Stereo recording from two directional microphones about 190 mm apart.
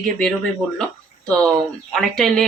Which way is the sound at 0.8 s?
5° left (ahead or behind).